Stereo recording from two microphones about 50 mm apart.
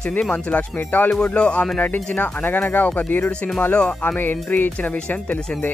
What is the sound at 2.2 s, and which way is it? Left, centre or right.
Speech, left.